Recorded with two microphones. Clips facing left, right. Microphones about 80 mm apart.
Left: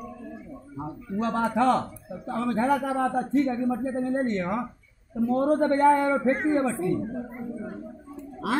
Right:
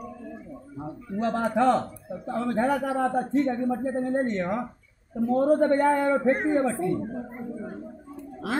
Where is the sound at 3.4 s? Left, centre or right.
Right; by 6.7 s centre.